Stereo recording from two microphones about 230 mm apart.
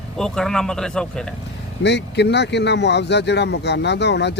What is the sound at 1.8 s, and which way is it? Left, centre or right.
Speech, left.